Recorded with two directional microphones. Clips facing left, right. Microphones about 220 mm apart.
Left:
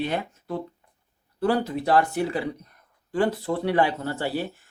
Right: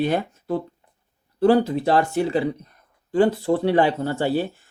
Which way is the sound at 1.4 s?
30° right (ahead or behind).